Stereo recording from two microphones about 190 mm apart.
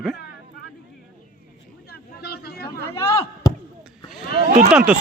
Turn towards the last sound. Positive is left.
turn(degrees=-5)  # may be behind; listen again after turning